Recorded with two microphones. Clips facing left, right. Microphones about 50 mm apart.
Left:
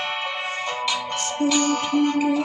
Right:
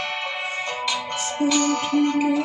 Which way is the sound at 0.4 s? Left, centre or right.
Centre.